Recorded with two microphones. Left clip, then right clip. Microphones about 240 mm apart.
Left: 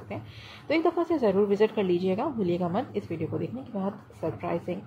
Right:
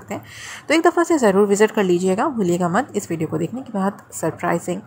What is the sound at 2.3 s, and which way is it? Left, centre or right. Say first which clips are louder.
A woman's voice: right 9 dB; right.